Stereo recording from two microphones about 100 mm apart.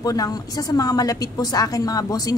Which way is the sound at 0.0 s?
40° left (ahead or behind).